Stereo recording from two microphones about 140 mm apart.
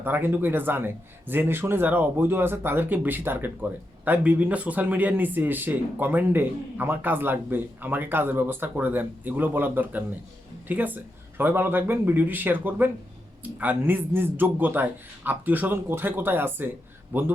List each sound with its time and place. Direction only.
0.0 s a man's voice: 15° right (ahead or behind)